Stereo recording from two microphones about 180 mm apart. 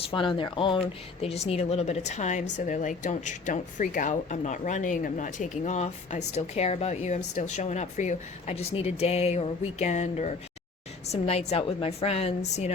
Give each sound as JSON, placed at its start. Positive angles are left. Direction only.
{"t": 0.1, "sound": "a woman's voice", "side_deg": 30}